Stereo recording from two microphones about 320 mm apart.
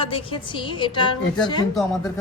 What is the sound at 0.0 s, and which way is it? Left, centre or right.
A woman's voice, centre.